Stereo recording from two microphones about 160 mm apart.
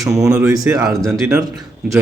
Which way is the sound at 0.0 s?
20° right (ahead or behind).